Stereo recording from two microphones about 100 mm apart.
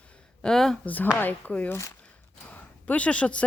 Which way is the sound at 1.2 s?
15° left (ahead or behind).